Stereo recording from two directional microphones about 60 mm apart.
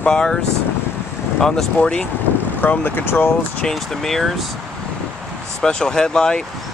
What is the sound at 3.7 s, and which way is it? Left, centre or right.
Speech, centre.